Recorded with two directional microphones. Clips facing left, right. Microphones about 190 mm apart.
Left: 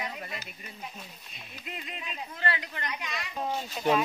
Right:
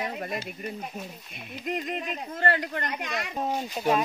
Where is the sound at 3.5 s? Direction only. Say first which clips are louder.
Right 1 dB; 10° right (ahead or behind).